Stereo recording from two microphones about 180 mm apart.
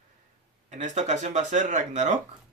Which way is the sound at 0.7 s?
40° right (ahead or behind).